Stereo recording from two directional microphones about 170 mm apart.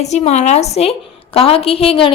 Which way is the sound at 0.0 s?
40° left (ahead or behind).